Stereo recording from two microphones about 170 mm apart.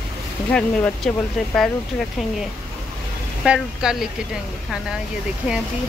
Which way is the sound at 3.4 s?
5° right (ahead or behind).